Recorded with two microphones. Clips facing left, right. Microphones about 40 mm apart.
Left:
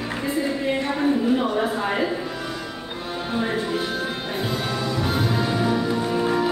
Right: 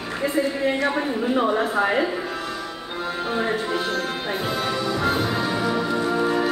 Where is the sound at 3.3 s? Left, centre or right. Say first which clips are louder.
Right 1 dB; centre.